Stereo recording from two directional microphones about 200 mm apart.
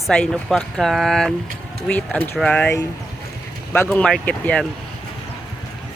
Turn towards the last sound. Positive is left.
turn(degrees=5)  # may be behind; listen again after turning